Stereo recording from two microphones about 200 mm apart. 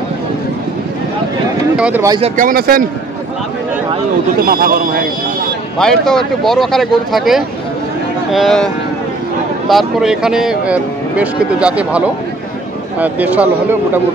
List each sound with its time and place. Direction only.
1.8 s speech: 5° right (ahead or behind)
2.2 s speech: 40° right (ahead or behind)
4.4 s speech: 50° right (ahead or behind)
5.8 s speech: centre (ahead or behind)
9.7 s speech: centre (ahead or behind)
13.0 s speech: 10° right (ahead or behind)